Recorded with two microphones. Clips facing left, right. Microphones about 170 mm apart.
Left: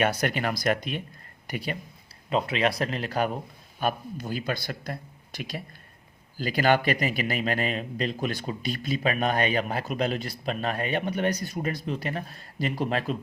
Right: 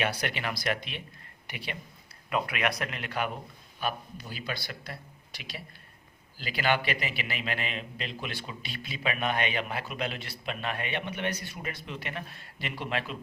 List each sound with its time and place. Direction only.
0.0 s a man's voice: 45° left (ahead or behind)
2.3 s a man's voice: 25° left (ahead or behind)